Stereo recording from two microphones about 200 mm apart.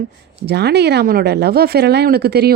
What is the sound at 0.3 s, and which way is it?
Speech, 55° right (ahead or behind).